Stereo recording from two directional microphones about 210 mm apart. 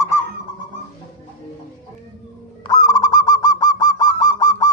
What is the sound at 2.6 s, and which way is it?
Goose, 20° left (ahead or behind).